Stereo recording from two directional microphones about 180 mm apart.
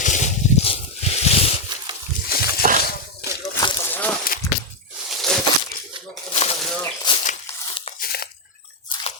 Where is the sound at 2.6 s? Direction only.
45° right (ahead or behind).